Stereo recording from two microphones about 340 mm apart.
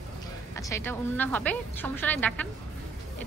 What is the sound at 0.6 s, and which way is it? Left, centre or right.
A woman's voice, centre.